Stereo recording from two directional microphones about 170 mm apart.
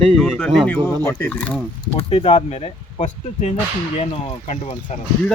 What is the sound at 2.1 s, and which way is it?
Speech, 30° left (ahead or behind).